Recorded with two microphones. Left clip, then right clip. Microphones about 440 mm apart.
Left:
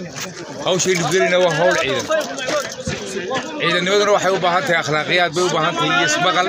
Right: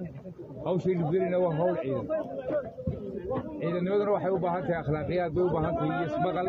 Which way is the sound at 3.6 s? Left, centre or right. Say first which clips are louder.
Left 13 dB; right.